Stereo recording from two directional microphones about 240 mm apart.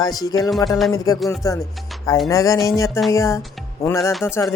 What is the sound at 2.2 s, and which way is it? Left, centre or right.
Music, centre.